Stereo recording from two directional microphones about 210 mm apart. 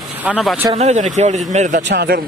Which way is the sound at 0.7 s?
35° right (ahead or behind).